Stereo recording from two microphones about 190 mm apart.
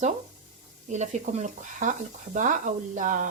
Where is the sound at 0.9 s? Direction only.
40° right (ahead or behind).